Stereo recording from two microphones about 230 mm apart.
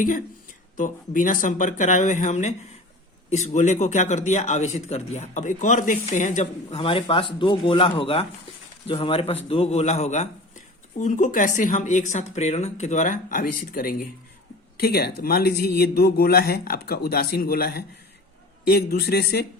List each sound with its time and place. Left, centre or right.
0.8 s speech: left
14.8 s speech: left